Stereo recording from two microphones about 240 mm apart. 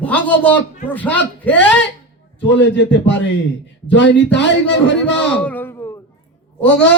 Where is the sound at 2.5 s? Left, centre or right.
Left.